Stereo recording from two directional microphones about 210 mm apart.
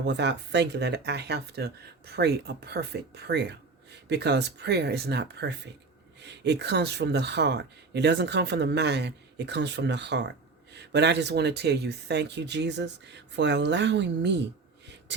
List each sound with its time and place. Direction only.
0.0 s speech: 55° right (ahead or behind)